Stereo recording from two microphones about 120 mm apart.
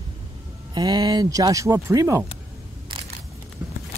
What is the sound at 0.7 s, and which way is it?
Speech, 35° right (ahead or behind).